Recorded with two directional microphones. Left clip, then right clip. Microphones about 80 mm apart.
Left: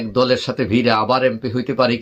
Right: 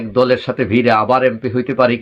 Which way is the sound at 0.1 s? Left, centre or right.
Left.